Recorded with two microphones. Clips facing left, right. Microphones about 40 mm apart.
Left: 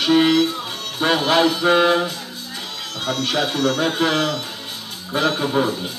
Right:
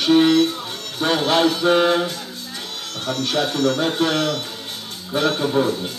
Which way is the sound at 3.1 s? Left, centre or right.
Left.